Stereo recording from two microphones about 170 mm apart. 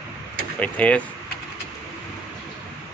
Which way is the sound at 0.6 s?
10° left (ahead or behind).